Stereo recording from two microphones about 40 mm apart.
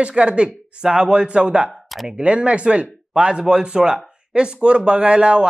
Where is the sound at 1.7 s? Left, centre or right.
Centre.